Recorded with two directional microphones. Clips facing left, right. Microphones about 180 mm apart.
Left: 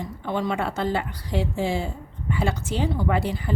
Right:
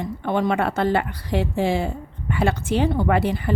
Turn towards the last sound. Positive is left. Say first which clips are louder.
# right 4 dB
turn(degrees=-60)  # may be behind; listen again after turning